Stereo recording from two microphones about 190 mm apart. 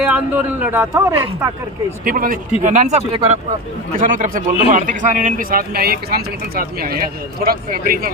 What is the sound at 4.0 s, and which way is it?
A man's voice, 45° right (ahead or behind).